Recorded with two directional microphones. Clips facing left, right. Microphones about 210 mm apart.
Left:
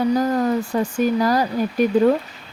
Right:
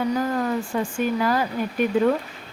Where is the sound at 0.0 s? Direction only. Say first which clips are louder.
Left 5 dB; 35° left (ahead or behind).